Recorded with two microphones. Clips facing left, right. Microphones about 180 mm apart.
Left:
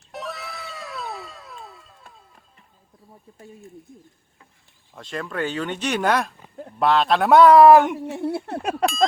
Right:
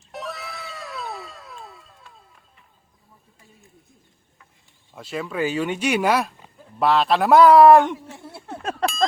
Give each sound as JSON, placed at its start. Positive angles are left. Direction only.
{"t": 0.1, "sound": "cat", "side_deg": 0}
{"t": 4.9, "sound": "speech", "side_deg": -5}
{"t": 7.9, "sound": "a sound", "side_deg": 65}